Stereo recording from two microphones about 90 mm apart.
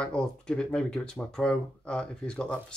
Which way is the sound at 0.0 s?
10° left (ahead or behind).